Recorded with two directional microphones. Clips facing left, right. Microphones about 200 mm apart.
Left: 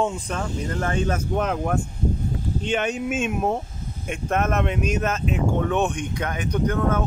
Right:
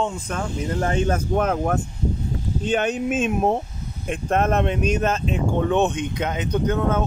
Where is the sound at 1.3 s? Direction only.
45° right (ahead or behind).